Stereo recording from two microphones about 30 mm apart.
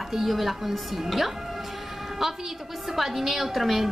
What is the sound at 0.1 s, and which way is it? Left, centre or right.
A woman's voice, centre.